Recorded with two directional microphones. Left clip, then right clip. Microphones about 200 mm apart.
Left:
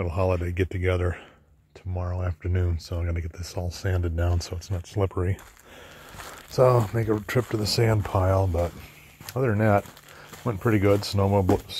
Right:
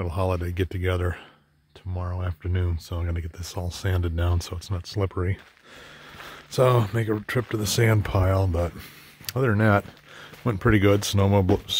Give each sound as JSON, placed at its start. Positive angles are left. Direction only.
{"t": 0.0, "sound": "speech", "side_deg": -5}
{"t": 4.4, "sound": "speech", "side_deg": -35}
{"t": 4.7, "sound": "speech", "side_deg": -15}
{"t": 6.5, "sound": "speech", "side_deg": -20}
{"t": 7.1, "sound": "speech", "side_deg": -5}
{"t": 7.8, "sound": "speech", "side_deg": -25}
{"t": 10.4, "sound": "speech", "side_deg": -40}